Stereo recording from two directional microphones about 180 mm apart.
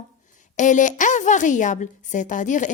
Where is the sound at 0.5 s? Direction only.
45° left (ahead or behind).